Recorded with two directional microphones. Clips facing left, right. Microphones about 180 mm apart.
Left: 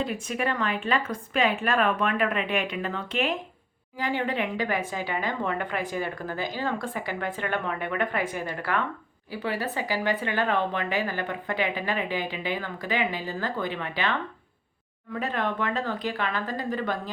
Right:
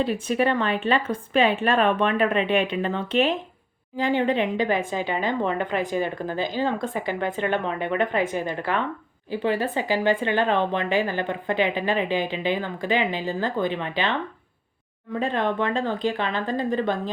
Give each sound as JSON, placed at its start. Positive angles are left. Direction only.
{"t": 0.0, "sound": "speech", "side_deg": -30}
{"t": 15.2, "sound": "speech", "side_deg": -25}